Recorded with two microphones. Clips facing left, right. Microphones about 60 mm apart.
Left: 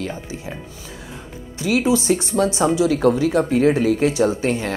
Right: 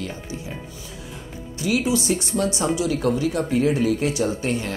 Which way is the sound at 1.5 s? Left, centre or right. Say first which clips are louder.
Left 4 dB; left.